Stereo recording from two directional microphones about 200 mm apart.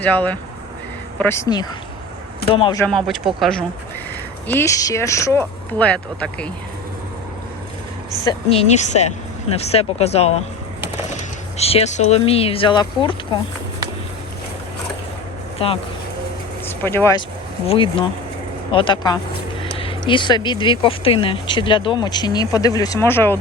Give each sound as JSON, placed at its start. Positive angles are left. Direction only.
{"t": 0.0, "sound": "speech", "side_deg": 10}
{"t": 2.7, "sound": "speech", "side_deg": 5}
{"t": 4.4, "sound": "speech", "side_deg": 15}
{"t": 8.2, "sound": "speech", "side_deg": 25}
{"t": 15.5, "sound": "speech", "side_deg": 30}
{"t": 16.6, "sound": "speech", "side_deg": 10}
{"t": 17.7, "sound": "speech", "side_deg": 25}